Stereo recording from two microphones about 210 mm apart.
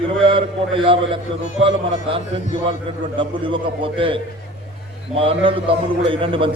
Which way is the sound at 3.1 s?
25° right (ahead or behind).